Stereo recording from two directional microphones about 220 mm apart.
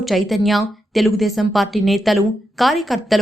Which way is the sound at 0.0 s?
Centre (ahead or behind).